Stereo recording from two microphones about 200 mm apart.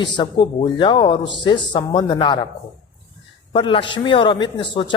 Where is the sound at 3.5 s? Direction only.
25° left (ahead or behind).